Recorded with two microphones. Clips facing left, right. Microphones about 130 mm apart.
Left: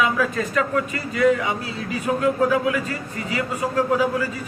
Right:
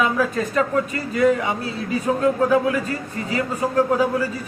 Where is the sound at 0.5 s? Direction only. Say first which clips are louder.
Right 2 dB; 35° right (ahead or behind).